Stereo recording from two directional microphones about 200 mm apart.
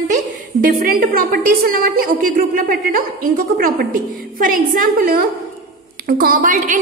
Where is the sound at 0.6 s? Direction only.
45° right (ahead or behind).